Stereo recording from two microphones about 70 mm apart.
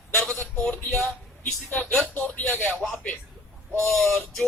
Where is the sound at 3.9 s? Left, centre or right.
Centre.